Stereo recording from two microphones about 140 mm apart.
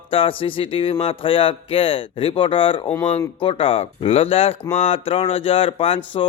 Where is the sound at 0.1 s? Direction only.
40° left (ahead or behind).